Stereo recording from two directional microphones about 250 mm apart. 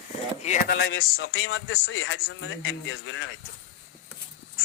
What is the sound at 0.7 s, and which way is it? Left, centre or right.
A man's voice, left.